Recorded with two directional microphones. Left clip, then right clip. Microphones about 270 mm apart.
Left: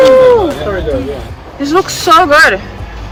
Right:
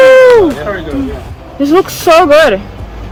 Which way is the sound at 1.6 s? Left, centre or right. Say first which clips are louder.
Right 2 dB; right.